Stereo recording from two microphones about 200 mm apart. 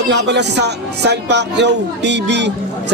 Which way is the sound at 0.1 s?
60° right (ahead or behind).